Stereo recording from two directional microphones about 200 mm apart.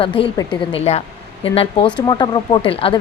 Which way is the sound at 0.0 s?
25° left (ahead or behind).